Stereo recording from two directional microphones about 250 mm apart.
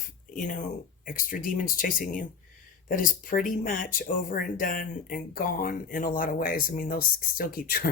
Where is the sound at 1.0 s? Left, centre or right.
Left.